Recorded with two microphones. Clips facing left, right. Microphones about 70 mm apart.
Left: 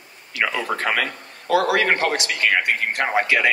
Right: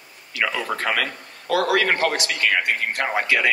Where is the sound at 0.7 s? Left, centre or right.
Left.